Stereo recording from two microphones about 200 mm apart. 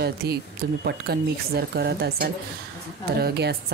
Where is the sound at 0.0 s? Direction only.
55° right (ahead or behind).